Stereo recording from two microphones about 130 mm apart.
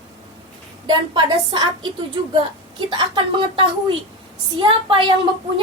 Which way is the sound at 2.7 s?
35° right (ahead or behind).